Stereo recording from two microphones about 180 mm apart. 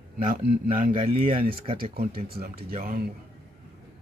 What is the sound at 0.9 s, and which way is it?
Speech, 30° right (ahead or behind).